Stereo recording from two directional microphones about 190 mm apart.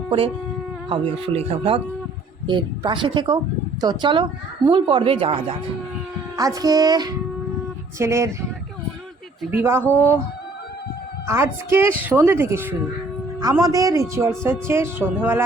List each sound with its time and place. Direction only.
0.9 s a woman's voice: 30° right (ahead or behind)
6.3 s a woman's voice: 20° right (ahead or behind)
9.4 s a woman's voice: 10° right (ahead or behind)
9.8 s speech: 10° left (ahead or behind)
11.3 s a woman's voice: 15° right (ahead or behind)